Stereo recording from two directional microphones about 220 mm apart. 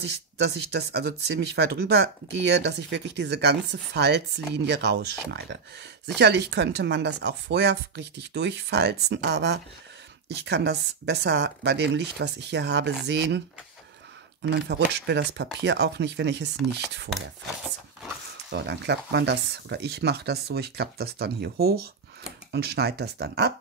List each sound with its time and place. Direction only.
0.7 s speech: 50° right (ahead or behind)
6.1 s speech: 50° right (ahead or behind)
14.4 s speech: 50° right (ahead or behind)
18.5 s speech: 50° right (ahead or behind)